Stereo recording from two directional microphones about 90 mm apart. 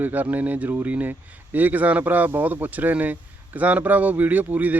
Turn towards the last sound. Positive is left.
turn(degrees=-20)  # may be behind; listen again after turning